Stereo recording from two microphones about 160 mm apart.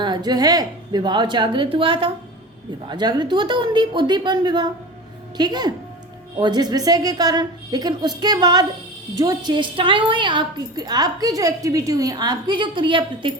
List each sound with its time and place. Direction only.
0.0 s a woman's voice: 25° right (ahead or behind)